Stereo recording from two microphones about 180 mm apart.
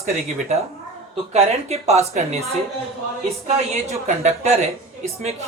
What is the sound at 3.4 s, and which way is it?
A woman's voice, 40° right (ahead or behind).